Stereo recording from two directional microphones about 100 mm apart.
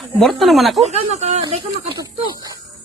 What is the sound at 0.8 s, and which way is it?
Speech, 90° right.